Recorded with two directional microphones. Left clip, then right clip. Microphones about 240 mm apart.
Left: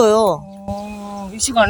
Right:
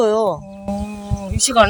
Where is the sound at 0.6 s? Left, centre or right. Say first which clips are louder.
Right 1 dB; centre.